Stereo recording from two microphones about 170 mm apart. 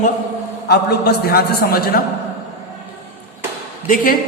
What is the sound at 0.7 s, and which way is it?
A man's voice, 75° left (ahead or behind).